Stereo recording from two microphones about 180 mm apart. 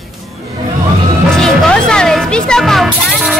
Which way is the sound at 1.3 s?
5° left (ahead or behind).